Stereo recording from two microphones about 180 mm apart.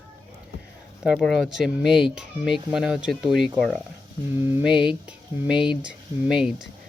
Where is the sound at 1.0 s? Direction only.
Centre (ahead or behind).